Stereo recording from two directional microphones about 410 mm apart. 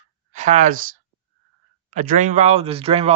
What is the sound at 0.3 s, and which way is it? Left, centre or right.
Speech, centre.